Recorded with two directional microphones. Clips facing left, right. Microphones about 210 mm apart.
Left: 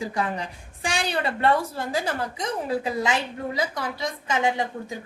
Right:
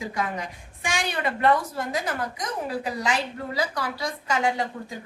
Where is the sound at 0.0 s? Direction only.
35° left (ahead or behind).